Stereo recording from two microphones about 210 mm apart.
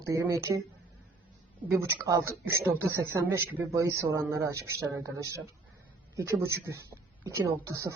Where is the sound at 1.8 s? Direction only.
15° right (ahead or behind).